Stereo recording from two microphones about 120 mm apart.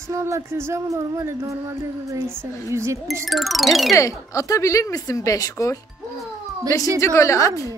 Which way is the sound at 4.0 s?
25° left (ahead or behind).